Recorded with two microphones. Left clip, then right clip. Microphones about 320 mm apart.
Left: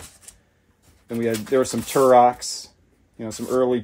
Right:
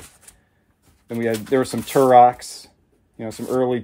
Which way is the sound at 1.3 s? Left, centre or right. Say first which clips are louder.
Even; right.